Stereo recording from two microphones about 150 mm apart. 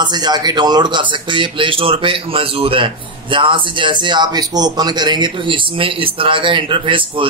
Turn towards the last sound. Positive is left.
turn(degrees=-35)  # may be behind; listen again after turning